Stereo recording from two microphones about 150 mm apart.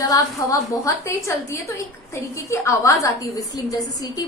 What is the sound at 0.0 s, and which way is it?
A woman's voice, 25° left (ahead or behind).